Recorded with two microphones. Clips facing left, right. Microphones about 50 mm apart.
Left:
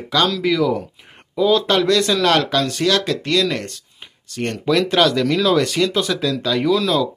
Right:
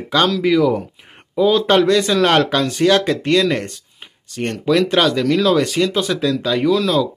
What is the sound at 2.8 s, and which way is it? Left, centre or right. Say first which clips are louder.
Speech: right 4 dB; right.